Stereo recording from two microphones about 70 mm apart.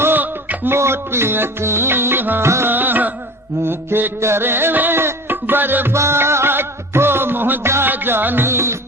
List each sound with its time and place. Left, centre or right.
0.0 s music: right
0.8 s music: right